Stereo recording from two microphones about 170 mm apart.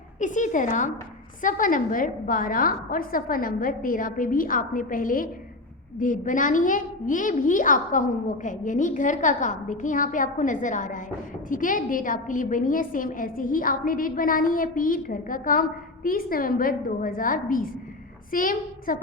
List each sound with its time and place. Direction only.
0.2 s a woman's voice: 50° left (ahead or behind)